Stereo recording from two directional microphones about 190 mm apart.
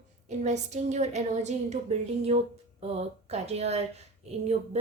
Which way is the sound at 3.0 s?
35° right (ahead or behind).